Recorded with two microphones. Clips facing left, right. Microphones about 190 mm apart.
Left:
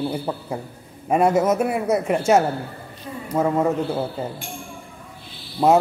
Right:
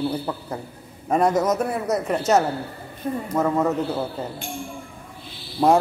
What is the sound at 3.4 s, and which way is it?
Speech, 10° left (ahead or behind).